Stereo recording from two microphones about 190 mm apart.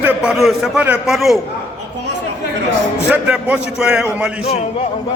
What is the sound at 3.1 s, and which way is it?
A man's voice, 5° right (ahead or behind).